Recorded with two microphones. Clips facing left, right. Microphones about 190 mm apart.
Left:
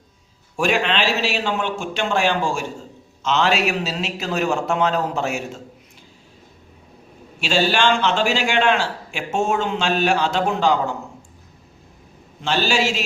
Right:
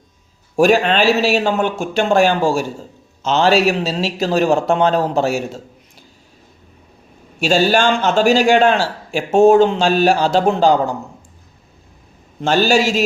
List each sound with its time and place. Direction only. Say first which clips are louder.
0.5 s a man's voice: right 7 dB; 40° right (ahead or behind)
7.3 s a man's voice: right 5 dB; 40° right (ahead or behind)
12.4 s a man's voice: right 6 dB; 45° right (ahead or behind)